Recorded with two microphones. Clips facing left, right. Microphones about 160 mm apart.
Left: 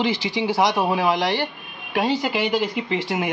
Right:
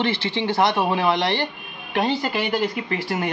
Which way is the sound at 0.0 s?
10° left (ahead or behind).